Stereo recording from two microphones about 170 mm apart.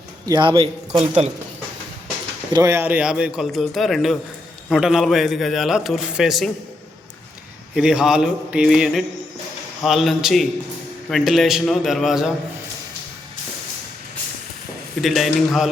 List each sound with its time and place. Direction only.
0.3 s a man's voice: 25° right (ahead or behind)
2.5 s a man's voice: 15° right (ahead or behind); by 6.5 s centre (ahead or behind)
7.8 s a man's voice: 5° right (ahead or behind)
15.0 s a man's voice: centre (ahead or behind)